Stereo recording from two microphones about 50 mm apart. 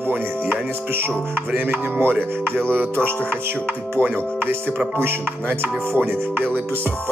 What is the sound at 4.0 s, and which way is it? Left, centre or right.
Speech, right.